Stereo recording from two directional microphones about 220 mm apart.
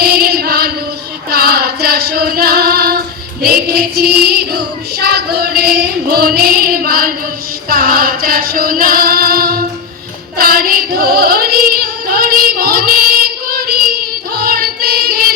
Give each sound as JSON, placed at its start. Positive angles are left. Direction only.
{"t": 0.0, "sound": "female singing", "side_deg": -45}
{"t": 3.4, "sound": "child singing", "side_deg": -45}
{"t": 7.7, "sound": "female singing", "side_deg": -45}